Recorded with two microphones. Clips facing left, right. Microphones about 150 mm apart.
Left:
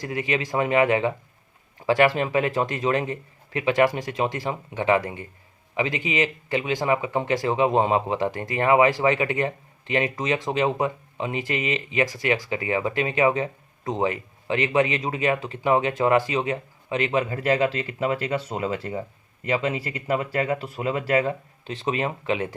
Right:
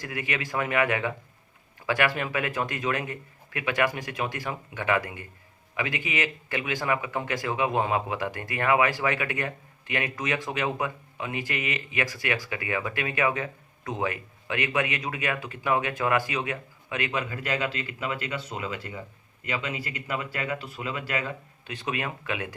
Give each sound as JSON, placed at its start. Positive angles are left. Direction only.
{"t": 0.0, "sound": "speech", "side_deg": 25}
{"t": 21.8, "sound": "speech", "side_deg": 25}